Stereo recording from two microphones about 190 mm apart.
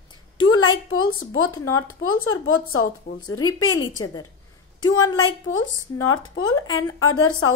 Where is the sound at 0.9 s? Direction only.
90° left.